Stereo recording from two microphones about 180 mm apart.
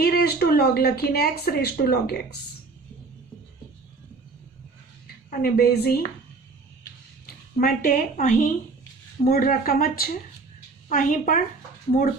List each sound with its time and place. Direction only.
0.0 s speech: 60° left (ahead or behind)
5.4 s a woman's voice: 60° left (ahead or behind)
7.5 s speech: 45° left (ahead or behind)